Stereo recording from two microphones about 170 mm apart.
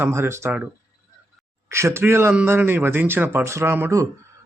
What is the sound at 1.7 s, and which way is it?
A man's voice, 15° right (ahead or behind).